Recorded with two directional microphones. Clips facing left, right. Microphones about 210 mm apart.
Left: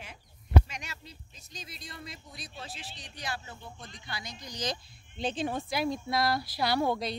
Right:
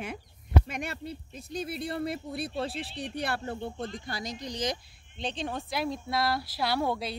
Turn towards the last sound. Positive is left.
turn(degrees=-5)  # may be behind; listen again after turning